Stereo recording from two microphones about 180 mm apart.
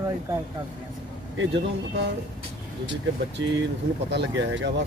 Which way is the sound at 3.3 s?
85° right.